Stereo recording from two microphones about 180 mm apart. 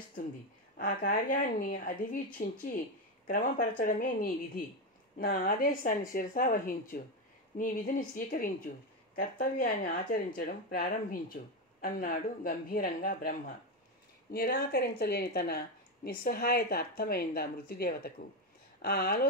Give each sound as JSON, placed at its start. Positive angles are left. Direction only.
{"t": 0.7, "sound": "speech", "side_deg": 50}